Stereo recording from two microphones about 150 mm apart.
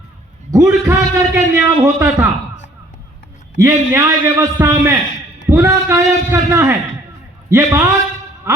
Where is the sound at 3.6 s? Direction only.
20° right (ahead or behind).